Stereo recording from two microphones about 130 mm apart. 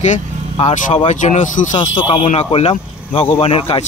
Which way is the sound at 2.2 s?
60° left (ahead or behind).